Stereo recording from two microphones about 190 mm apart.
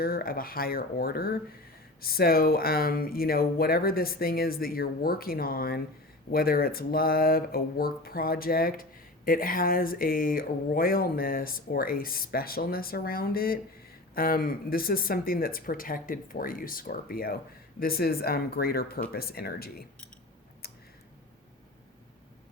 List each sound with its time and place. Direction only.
0.0 s speech: 50° left (ahead or behind)